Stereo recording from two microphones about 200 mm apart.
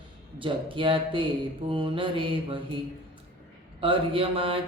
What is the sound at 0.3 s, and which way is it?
Mantra, 25° right (ahead or behind).